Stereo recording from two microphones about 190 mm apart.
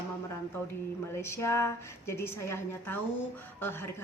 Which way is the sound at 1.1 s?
15° left (ahead or behind).